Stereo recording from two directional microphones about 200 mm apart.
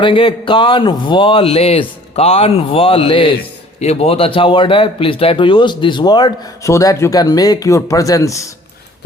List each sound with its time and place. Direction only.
0.0 s speech: 25° left (ahead or behind)